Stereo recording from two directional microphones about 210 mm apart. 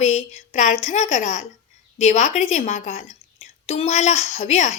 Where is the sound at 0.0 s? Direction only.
35° left (ahead or behind).